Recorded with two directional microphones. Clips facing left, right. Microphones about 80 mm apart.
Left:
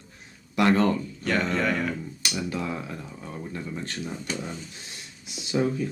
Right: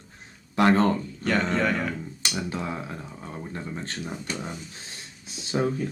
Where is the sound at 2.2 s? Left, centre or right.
Right.